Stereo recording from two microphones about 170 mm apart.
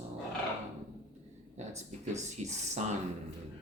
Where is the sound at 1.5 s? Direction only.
40° right (ahead or behind).